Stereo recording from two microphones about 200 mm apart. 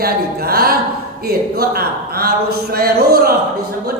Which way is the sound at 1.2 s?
50° right (ahead or behind).